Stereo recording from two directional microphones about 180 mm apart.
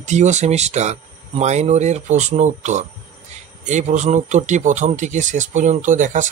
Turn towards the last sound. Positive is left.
turn(degrees=-45)  # may be behind; listen again after turning